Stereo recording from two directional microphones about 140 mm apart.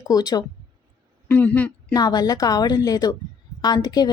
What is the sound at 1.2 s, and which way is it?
Speech, 10° left (ahead or behind).